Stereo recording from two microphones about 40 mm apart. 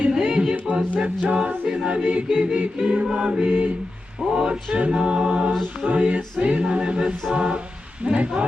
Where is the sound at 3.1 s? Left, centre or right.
Right.